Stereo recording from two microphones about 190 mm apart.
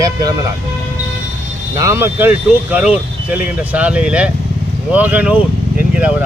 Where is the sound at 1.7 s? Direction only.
15° right (ahead or behind).